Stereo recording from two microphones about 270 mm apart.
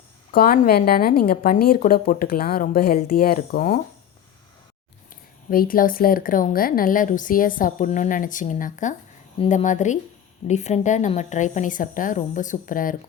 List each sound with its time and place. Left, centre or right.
0.3 s speech: left
5.5 s a woman's voice: left